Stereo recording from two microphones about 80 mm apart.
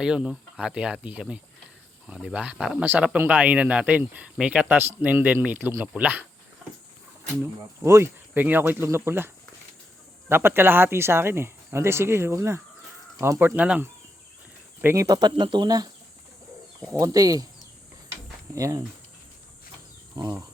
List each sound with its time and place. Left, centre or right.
0.0 s speech: centre
7.9 s speech: right
8.3 s speech: right
13.6 s speech: centre
14.9 s speech: right
16.9 s speech: right
18.5 s speech: right
20.2 s speech: right